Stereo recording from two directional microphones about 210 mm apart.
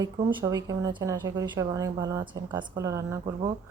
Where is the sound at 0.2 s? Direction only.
20° right (ahead or behind).